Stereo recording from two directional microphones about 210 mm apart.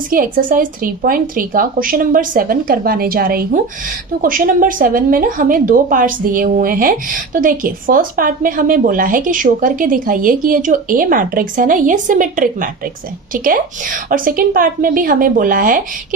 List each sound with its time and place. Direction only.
0.1 s a woman's voice: 40° right (ahead or behind)